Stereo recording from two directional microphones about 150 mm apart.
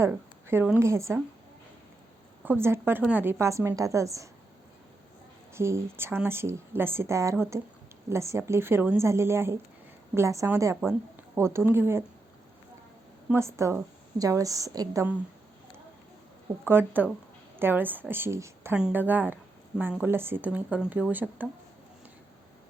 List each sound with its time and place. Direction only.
0.0 s speech: 15° right (ahead or behind)
2.4 s a woman's voice: 15° right (ahead or behind)
5.5 s a woman's voice: 15° right (ahead or behind)
13.3 s a woman's voice: 20° right (ahead or behind)
16.6 s speech: 15° right (ahead or behind)